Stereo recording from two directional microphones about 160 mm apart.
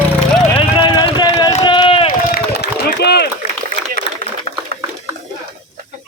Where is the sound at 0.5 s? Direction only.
35° left (ahead or behind).